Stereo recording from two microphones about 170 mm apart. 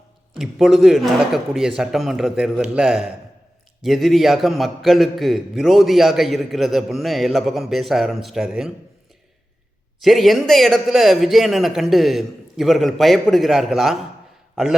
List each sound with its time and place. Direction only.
0.3 s a man's voice: centre (ahead or behind)
10.0 s a man's voice: centre (ahead or behind)